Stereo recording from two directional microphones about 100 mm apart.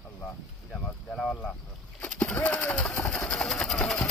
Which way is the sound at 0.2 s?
10° left (ahead or behind).